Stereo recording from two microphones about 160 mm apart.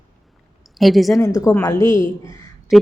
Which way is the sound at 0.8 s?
Centre (ahead or behind).